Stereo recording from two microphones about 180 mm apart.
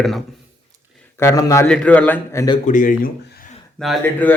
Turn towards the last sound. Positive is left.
turn(degrees=10)  # may be behind; listen again after turning